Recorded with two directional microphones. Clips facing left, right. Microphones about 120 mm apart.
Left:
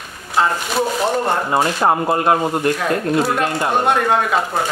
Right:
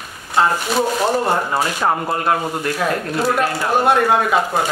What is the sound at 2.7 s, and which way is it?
Speech, 5° right (ahead or behind).